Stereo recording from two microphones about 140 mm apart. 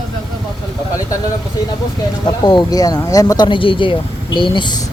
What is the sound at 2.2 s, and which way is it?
Speech, 30° left (ahead or behind).